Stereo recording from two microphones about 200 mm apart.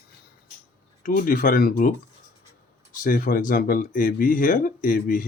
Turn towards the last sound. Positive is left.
turn(degrees=45)  # may be behind; listen again after turning